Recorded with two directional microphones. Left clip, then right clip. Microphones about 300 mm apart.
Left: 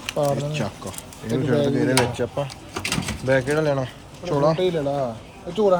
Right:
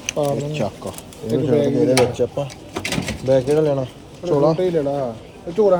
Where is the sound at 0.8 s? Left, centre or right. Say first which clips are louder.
Right 4 dB; centre.